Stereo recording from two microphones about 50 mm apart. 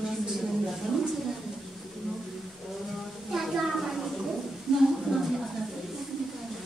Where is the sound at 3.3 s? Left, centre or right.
Centre.